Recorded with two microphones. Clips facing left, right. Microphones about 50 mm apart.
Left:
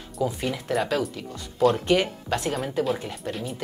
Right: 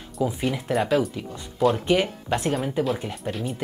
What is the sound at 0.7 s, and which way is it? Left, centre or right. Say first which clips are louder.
Speech: right 1 dB; right.